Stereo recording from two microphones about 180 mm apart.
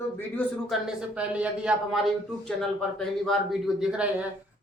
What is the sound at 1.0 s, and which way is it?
A man's voice, 5° right (ahead or behind).